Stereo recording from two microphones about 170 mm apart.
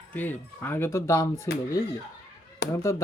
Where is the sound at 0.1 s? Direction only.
10° left (ahead or behind).